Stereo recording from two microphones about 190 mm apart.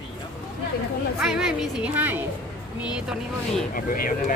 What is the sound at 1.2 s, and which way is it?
Speech, centre (ahead or behind).